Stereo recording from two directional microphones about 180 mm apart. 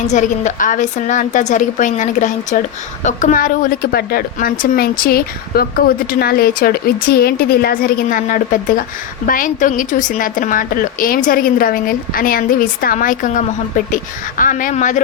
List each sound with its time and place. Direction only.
0.0 s a woman's voice: 40° left (ahead or behind)